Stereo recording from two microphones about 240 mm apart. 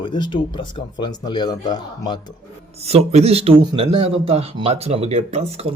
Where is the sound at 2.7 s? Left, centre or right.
Right.